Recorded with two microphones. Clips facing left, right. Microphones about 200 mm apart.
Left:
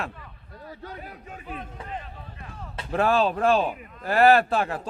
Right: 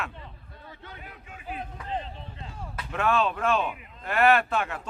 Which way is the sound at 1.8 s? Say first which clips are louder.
Right 3 dB; 25° right (ahead or behind).